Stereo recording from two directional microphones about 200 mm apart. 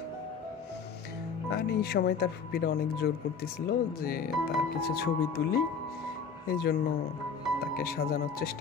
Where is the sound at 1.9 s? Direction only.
50° left (ahead or behind).